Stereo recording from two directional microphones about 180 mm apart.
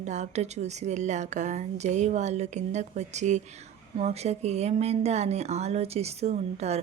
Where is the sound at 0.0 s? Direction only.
40° right (ahead or behind).